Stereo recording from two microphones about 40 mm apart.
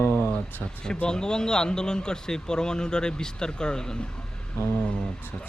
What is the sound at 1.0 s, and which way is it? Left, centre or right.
Speech, centre.